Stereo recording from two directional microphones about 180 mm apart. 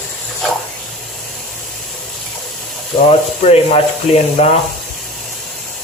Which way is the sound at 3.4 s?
35° left (ahead or behind).